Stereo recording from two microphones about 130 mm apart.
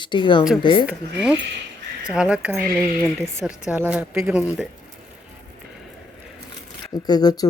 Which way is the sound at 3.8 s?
15° right (ahead or behind).